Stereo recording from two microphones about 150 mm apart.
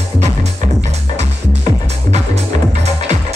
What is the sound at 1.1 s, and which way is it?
Music, 50° right (ahead or behind).